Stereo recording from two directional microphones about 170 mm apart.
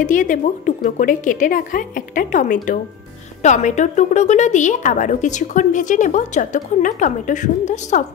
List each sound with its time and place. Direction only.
0.0 s a woman's voice: 50° left (ahead or behind)